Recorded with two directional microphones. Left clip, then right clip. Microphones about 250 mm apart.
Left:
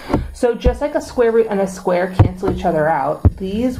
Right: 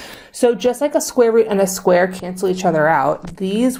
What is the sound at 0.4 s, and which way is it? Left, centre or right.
Speech, right.